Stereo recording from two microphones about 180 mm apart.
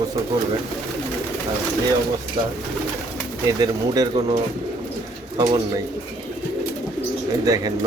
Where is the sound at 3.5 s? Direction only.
20° right (ahead or behind).